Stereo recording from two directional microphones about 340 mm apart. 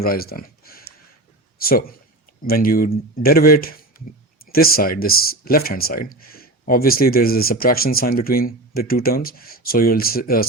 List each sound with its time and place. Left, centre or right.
0.0 s a man's voice: left